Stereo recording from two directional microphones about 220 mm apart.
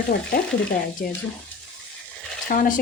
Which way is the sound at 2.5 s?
40° left (ahead or behind).